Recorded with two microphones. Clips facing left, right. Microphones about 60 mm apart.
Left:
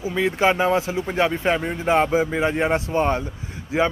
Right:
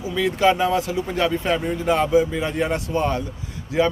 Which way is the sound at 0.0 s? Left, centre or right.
Left.